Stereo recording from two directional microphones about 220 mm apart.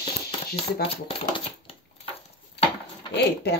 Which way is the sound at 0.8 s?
25° left (ahead or behind).